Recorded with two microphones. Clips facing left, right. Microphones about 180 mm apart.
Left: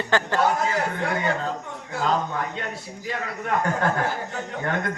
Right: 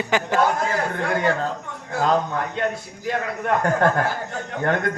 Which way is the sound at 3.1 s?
50° right (ahead or behind).